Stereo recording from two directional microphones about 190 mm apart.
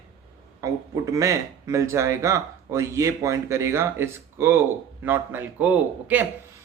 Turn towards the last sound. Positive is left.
turn(degrees=-10)  # may be behind; listen again after turning